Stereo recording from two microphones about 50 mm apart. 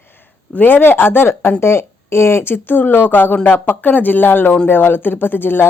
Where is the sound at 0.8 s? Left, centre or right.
Left.